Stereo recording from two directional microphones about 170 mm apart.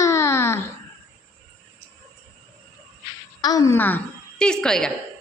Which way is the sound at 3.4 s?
20° left (ahead or behind).